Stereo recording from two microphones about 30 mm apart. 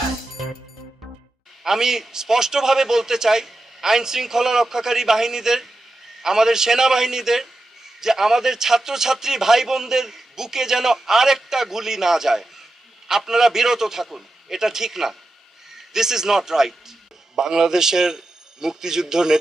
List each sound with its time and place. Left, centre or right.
1.6 s a man's voice: centre